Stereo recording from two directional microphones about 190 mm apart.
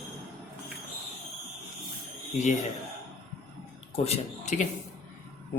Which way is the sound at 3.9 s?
35° left (ahead or behind).